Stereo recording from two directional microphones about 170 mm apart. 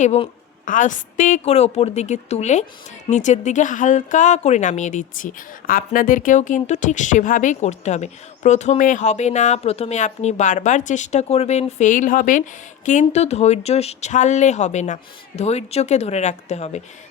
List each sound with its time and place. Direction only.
0.0 s a woman's voice: 45° left (ahead or behind)